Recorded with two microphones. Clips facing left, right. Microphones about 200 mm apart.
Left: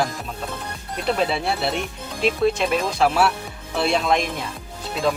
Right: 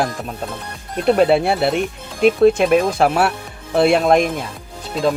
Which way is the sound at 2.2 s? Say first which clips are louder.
Right 8 dB; 55° right (ahead or behind).